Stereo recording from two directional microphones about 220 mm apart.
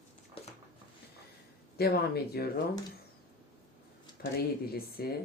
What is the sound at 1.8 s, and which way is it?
Speech, 45° left (ahead or behind).